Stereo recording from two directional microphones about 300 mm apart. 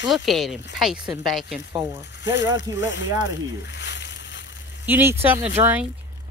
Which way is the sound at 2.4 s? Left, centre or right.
Left.